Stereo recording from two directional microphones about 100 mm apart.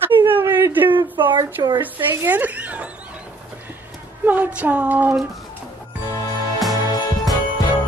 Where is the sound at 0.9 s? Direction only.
55° right (ahead or behind).